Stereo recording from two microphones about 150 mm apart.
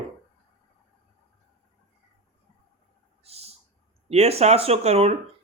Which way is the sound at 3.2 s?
45° right (ahead or behind).